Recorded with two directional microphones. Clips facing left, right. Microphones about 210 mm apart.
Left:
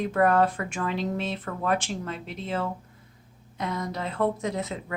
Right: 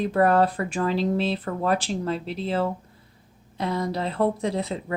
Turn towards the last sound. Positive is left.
turn(degrees=-30)  # may be behind; listen again after turning